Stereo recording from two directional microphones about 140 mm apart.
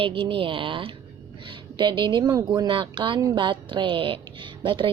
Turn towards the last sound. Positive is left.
turn(degrees=-35)  # may be behind; listen again after turning